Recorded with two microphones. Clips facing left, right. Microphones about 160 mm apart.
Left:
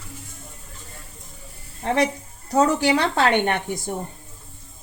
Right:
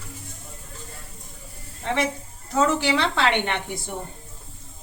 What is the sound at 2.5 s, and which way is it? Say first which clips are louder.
A woman's voice: left 3 dB; 40° left (ahead or behind).